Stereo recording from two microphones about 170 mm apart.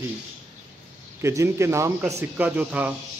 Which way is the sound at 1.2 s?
15° right (ahead or behind).